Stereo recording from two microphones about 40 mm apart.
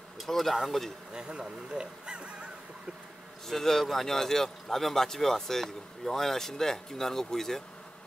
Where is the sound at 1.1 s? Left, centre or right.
Right.